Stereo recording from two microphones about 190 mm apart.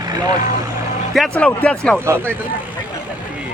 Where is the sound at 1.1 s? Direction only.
5° left (ahead or behind).